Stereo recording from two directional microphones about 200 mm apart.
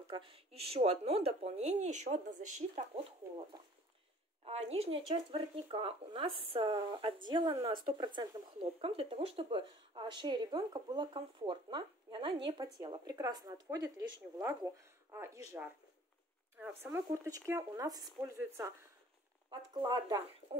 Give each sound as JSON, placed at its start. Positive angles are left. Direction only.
{"t": 0.1, "sound": "speech", "side_deg": -25}
{"t": 4.5, "sound": "speech", "side_deg": -30}
{"t": 16.5, "sound": "speech", "side_deg": -10}
{"t": 19.7, "sound": "speech", "side_deg": -20}